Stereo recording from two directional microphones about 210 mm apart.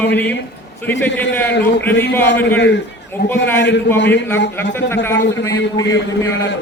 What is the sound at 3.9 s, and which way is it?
Speech, 55° left (ahead or behind).